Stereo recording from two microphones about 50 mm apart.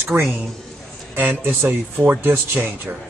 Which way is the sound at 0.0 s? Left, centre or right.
Right.